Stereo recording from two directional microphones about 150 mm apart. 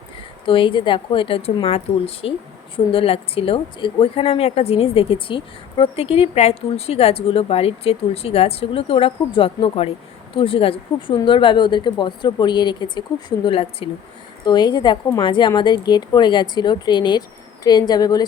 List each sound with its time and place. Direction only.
0.4 s speech: 35° left (ahead or behind)
14.4 s a woman's voice: 30° left (ahead or behind)